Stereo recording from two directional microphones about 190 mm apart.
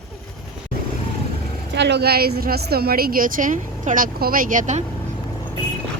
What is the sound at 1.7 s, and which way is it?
A woman's voice, 65° right (ahead or behind).